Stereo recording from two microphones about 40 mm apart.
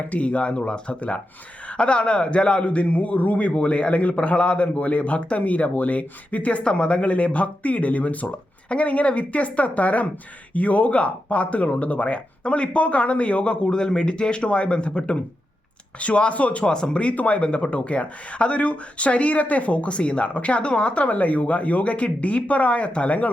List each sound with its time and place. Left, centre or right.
0.1 s a man's voice: left
16.6 s a man's voice: left